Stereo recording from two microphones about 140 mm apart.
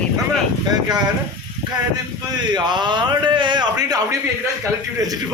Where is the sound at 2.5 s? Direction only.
30° right (ahead or behind).